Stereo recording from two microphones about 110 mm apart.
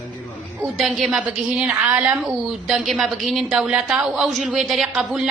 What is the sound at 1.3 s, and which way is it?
A woman's voice, 15° right (ahead or behind).